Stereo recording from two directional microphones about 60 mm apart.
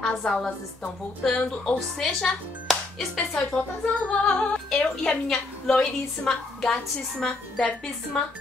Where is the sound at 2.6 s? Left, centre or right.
Centre.